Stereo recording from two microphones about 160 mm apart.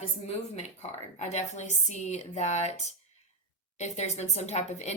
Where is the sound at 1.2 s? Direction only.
45° left (ahead or behind).